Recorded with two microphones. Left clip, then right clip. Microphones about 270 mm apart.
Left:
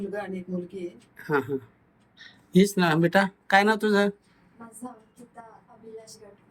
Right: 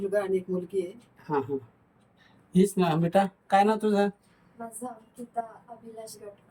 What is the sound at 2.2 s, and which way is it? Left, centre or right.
Speech, centre.